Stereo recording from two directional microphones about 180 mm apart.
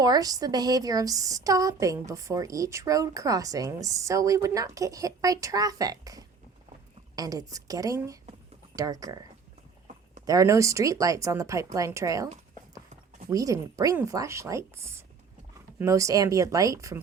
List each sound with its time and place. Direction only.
0.0 s a woman's voice: 20° right (ahead or behind)
10.2 s speech: 20° right (ahead or behind)
13.3 s speech: 20° right (ahead or behind)